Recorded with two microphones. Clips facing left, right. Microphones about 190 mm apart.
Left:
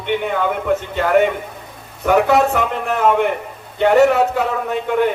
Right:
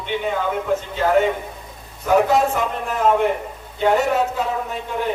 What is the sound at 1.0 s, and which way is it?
A man's voice, 65° left (ahead or behind).